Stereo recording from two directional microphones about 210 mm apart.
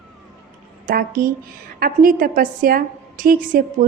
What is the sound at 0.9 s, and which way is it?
A woman's voice, 40° right (ahead or behind).